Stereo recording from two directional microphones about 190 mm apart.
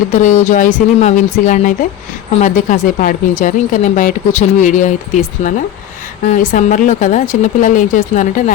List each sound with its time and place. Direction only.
0.1 s speech: 40° left (ahead or behind)